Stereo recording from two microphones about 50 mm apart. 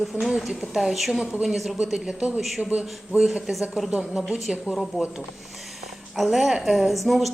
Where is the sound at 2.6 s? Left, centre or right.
Right.